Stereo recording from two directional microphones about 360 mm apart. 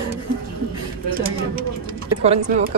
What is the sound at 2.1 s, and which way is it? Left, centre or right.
Speech, centre.